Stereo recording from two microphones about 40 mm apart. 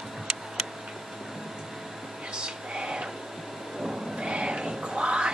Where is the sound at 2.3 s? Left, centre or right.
Right.